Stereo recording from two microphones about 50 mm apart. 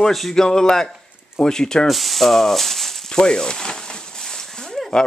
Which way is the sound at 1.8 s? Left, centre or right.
Centre.